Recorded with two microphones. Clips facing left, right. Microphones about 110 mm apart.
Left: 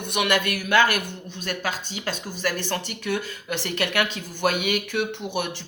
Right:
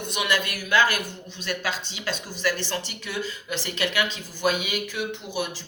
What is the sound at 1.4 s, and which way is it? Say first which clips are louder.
Speech: even; 50° left (ahead or behind).